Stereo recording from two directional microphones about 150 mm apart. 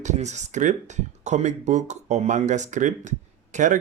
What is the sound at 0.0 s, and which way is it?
Speech, 50° right (ahead or behind).